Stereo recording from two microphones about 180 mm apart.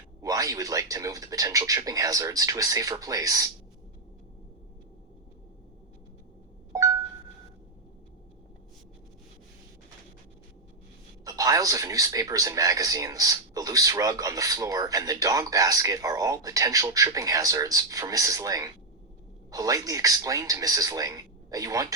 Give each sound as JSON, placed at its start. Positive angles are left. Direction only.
{"t": 0.2, "sound": "speech", "side_deg": -20}
{"t": 11.3, "sound": "speech", "side_deg": -20}